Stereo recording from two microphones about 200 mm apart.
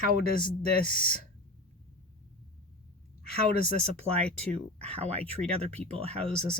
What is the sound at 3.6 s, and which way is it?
Speech, 30° right (ahead or behind).